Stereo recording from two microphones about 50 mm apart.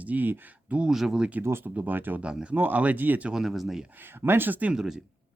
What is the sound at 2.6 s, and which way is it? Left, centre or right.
Speech, right.